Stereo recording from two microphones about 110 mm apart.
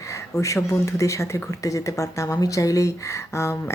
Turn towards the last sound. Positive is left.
turn(degrees=25)  # may be behind; listen again after turning